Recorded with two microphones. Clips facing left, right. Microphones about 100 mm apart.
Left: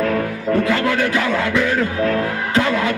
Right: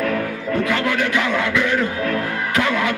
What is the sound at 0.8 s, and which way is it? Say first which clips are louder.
Music: left 2 dB; 30° left (ahead or behind).